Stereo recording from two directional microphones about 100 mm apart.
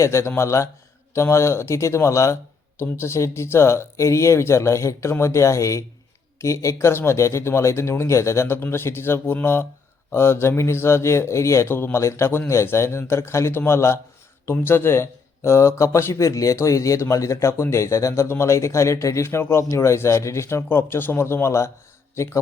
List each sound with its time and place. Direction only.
0.0 s speech: 30° left (ahead or behind)